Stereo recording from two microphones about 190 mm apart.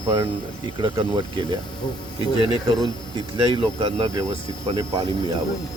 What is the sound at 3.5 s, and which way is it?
Speech, 25° right (ahead or behind).